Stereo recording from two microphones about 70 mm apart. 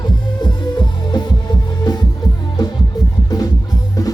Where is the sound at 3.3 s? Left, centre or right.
Left.